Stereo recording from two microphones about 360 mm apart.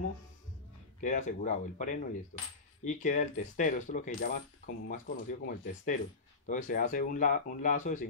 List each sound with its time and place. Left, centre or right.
1.0 s speech: left